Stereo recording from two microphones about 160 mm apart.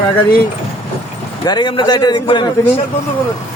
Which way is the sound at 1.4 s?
25° left (ahead or behind).